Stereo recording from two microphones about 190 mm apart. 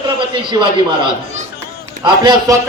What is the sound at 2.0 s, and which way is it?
Speech, 25° right (ahead or behind).